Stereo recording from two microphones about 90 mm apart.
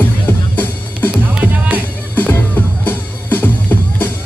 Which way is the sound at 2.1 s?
20° left (ahead or behind).